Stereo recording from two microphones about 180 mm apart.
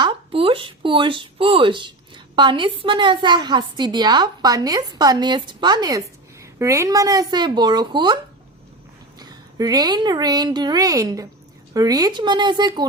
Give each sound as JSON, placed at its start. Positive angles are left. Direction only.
{"t": 0.0, "sound": "a woman's voice", "side_deg": -30}